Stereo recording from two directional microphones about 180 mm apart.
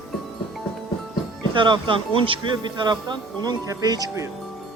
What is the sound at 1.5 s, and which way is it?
Speech, 25° right (ahead or behind).